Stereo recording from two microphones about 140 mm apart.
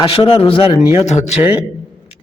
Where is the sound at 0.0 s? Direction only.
35° left (ahead or behind).